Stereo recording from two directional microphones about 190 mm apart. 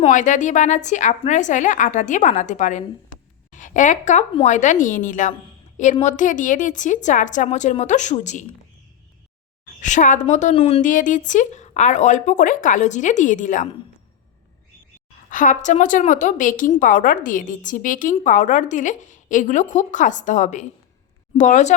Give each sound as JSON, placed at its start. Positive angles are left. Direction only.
{"t": 0.0, "sound": "a woman's voice", "side_deg": 40}
{"t": 9.8, "sound": "a woman's voice", "side_deg": 40}
{"t": 10.8, "sound": "a woman's voice", "side_deg": 45}
{"t": 15.3, "sound": "a woman's voice", "side_deg": 45}